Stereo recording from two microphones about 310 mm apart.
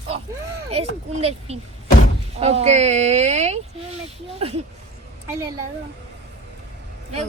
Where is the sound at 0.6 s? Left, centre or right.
Centre.